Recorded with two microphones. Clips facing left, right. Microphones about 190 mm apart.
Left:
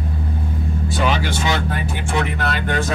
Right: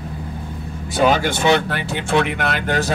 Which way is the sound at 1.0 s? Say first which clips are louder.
Right 6 dB; 50° right (ahead or behind).